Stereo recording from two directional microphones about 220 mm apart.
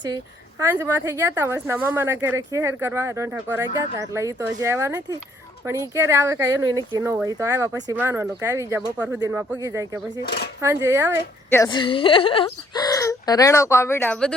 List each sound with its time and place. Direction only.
0.6 s speech: 10° right (ahead or behind)
10.2 s cutlery: 45° left (ahead or behind)
10.6 s speech: 15° right (ahead or behind)
11.5 s speech: 15° left (ahead or behind)